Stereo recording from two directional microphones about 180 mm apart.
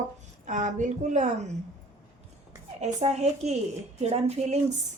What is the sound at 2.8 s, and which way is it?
A woman's voice, 40° right (ahead or behind).